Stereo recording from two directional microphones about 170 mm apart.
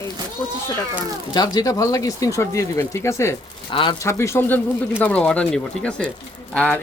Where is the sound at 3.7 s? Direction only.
30° left (ahead or behind).